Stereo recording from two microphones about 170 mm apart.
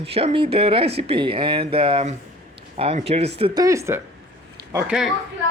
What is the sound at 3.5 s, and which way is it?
Speech, 20° right (ahead or behind).